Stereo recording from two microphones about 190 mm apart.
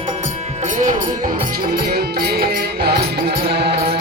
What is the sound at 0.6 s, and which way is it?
Music, 40° right (ahead or behind).